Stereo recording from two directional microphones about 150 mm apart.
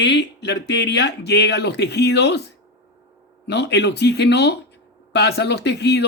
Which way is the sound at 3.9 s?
90° left.